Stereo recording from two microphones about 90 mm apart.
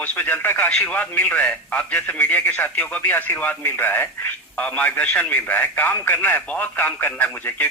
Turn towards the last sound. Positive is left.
turn(degrees=20)  # may be behind; listen again after turning